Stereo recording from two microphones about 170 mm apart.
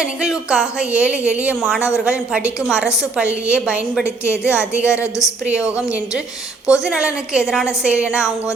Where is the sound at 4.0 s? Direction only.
15° left (ahead or behind).